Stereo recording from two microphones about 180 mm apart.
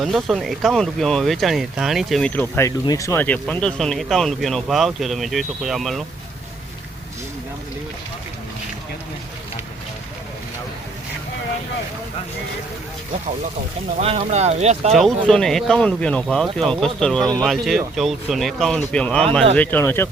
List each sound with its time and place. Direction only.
0.0 s speech: centre (ahead or behind)
14.0 s speech: 35° right (ahead or behind)
14.9 s speech: centre (ahead or behind)